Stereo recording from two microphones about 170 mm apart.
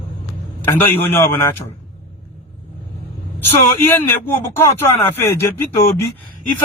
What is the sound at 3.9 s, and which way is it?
Speech, 15° left (ahead or behind).